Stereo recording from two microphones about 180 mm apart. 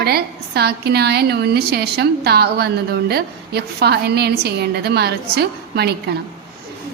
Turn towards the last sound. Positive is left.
turn(degrees=-65)  # may be behind; listen again after turning